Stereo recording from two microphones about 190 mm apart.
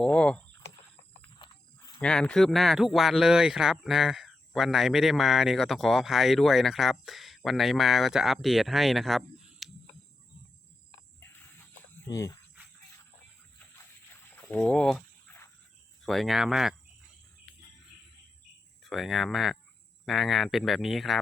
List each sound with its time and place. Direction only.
0.0 s a sound: 5° left (ahead or behind)
1.4 s wild animals: 20° left (ahead or behind)
2.0 s speech: 5° left (ahead or behind)
11.2 s cricket: 10° left (ahead or behind)
12.0 s speech: 20° left (ahead or behind)
14.5 s a sound: 5° left (ahead or behind)
16.0 s speech: centre (ahead or behind)
18.8 s speech: centre (ahead or behind)